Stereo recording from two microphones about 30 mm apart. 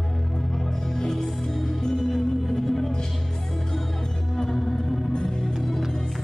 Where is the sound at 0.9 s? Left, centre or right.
Centre.